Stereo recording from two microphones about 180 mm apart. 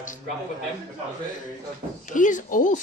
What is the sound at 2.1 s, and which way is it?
Speech, 45° left (ahead or behind).